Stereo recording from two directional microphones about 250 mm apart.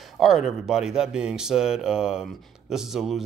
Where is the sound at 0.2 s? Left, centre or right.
Centre.